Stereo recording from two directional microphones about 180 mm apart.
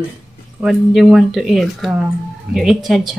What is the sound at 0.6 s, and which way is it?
A woman's voice, centre (ahead or behind).